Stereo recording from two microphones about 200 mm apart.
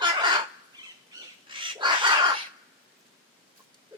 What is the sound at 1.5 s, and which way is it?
Bird, 25° right (ahead or behind).